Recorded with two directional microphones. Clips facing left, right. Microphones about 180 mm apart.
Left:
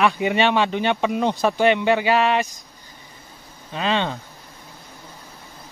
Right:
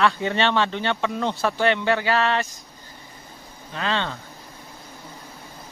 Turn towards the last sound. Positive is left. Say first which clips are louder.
# left 4 dB
turn(degrees=15)  # may be behind; listen again after turning